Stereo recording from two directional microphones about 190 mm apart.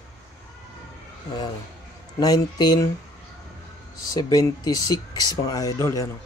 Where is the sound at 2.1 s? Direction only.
20° left (ahead or behind).